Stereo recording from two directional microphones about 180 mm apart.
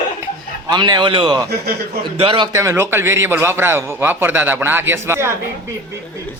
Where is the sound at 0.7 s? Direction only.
25° right (ahead or behind).